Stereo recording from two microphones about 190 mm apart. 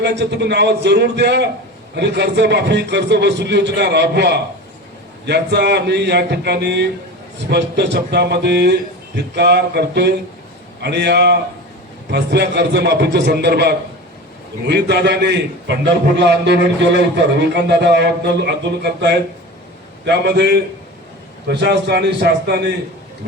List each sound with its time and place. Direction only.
0.0 s a man's voice: 65° right (ahead or behind)